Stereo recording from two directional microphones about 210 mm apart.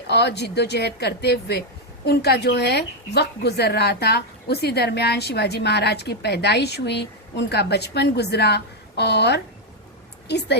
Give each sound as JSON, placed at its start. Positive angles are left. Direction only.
{"t": 0.1, "sound": "speech", "side_deg": 55}